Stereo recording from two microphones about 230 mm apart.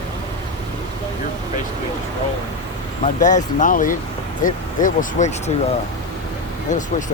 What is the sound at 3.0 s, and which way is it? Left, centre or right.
Speech, left.